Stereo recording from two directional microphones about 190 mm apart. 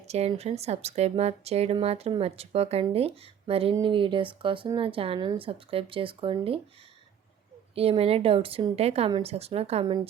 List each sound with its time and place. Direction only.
0.0 s speech: 35° right (ahead or behind)
7.8 s speech: 30° right (ahead or behind)